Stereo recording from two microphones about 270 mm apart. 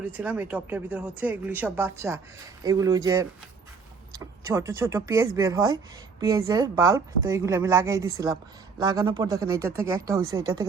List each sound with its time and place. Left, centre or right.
0.0 s a woman's voice: centre